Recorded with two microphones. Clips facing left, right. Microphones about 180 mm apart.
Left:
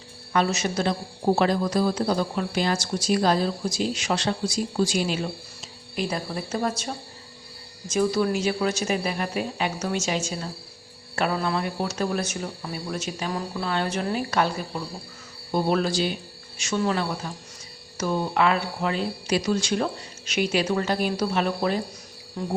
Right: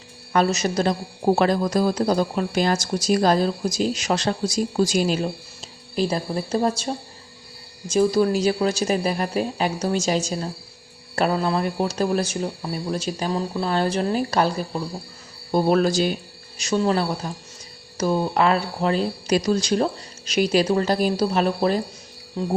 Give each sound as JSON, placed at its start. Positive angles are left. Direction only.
{"t": 0.3, "sound": "speech", "side_deg": -40}
{"t": 22.4, "sound": "cricket", "side_deg": -25}